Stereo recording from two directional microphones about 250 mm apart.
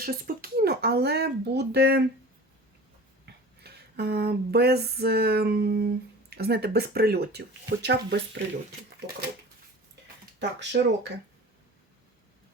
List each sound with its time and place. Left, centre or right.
0.0 s speech: right
3.2 s a sound: right
6.3 s speech: right
10.6 s speech: right